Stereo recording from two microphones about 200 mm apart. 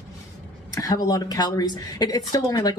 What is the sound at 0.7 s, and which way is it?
A woman's voice, 15° left (ahead or behind).